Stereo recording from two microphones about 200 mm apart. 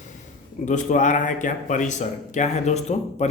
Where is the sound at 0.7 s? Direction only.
40° left (ahead or behind).